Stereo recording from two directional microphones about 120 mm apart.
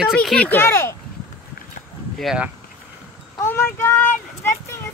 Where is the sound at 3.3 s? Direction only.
20° left (ahead or behind).